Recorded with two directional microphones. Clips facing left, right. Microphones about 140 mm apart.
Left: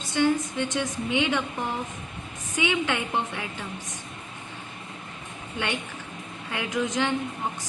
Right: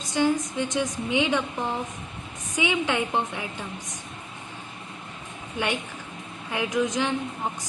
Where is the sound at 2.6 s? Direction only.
15° right (ahead or behind).